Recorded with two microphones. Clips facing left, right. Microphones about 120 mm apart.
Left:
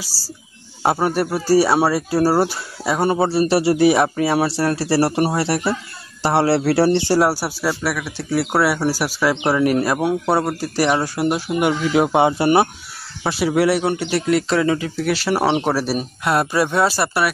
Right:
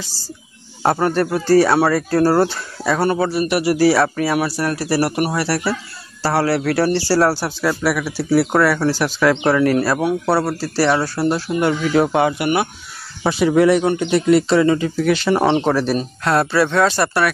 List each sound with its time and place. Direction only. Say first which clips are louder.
0.1 s speech: right 1 dB; 10° left (ahead or behind)
3.2 s speech: left 2 dB; 30° left (ahead or behind); by 8.5 s 5° right (ahead or behind)
8.5 s speech: right 2 dB; 10° left (ahead or behind); by 12.6 s 30° left (ahead or behind)
13.2 s speech: right 3 dB; 5° left (ahead or behind)